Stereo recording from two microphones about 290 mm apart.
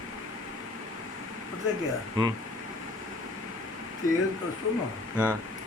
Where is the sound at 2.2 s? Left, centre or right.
Centre.